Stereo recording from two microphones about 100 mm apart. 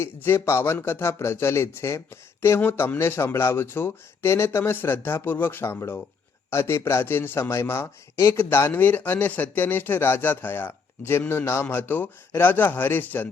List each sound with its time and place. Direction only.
0.0 s a man's voice: 25° left (ahead or behind)